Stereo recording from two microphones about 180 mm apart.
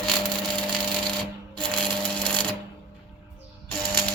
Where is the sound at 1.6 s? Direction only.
5° left (ahead or behind).